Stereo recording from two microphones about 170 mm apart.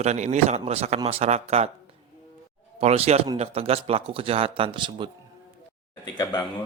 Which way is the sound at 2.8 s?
40° right (ahead or behind).